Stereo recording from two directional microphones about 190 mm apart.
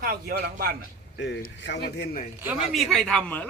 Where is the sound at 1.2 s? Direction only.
65° left (ahead or behind).